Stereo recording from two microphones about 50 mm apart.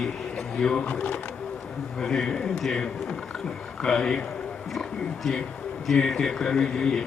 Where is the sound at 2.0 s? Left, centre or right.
Centre.